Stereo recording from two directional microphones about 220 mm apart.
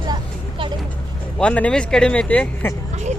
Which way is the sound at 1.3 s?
5° left (ahead or behind).